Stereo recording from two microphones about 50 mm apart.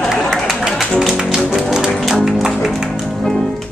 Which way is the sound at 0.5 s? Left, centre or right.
Centre.